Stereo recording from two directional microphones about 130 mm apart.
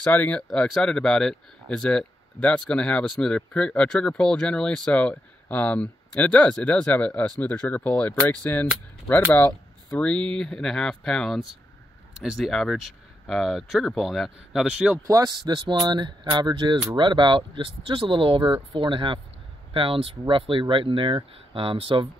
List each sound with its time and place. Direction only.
0.0 s speech: 10° left (ahead or behind); by 15.0 s 5° right (ahead or behind)
15.0 s speech: 30° right (ahead or behind); by 22.0 s 45° right (ahead or behind)